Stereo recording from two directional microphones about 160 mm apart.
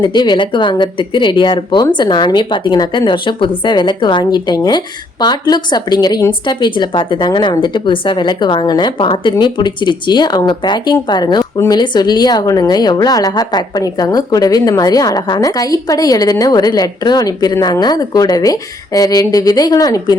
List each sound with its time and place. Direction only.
0.0 s a woman's voice: 30° left (ahead or behind)